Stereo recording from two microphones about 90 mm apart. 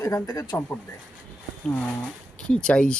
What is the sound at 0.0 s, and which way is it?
Speech, 40° left (ahead or behind).